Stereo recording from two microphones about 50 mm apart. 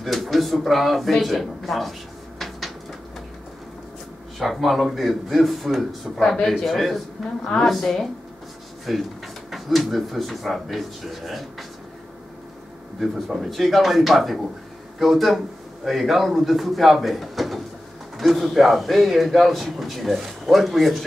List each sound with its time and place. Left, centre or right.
0.0 s a sound: centre
4.4 s a man's voice: centre
6.1 s a man's voice: centre
13.0 s a man's voice: centre